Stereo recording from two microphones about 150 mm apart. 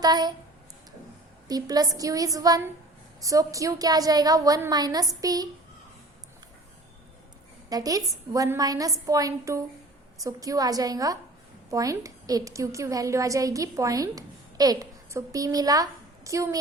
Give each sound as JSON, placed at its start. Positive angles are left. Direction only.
{"t": 0.0, "sound": "a woman's voice", "side_deg": -25}
{"t": 1.5, "sound": "a woman's voice", "side_deg": -25}
{"t": 7.7, "sound": "a woman's voice", "side_deg": -25}